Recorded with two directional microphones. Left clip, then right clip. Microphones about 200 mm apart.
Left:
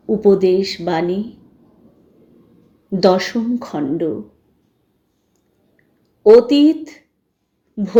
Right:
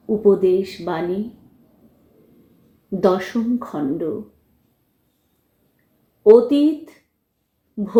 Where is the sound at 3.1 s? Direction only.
35° left (ahead or behind).